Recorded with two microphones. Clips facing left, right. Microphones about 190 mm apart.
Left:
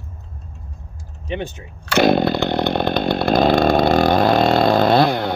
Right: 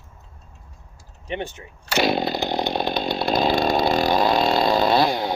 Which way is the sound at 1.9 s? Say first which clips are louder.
Left 6 dB; 55° left (ahead or behind).